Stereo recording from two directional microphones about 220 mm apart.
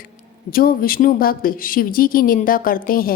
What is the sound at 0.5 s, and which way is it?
A woman's voice, 40° left (ahead or behind).